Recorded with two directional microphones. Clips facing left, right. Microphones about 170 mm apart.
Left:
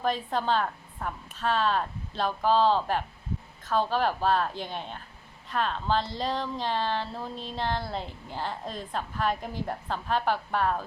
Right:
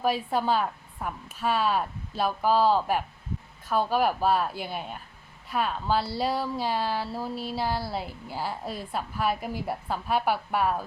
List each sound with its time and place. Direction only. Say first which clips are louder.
0.0 s speech: right 2 dB; 10° right (ahead or behind)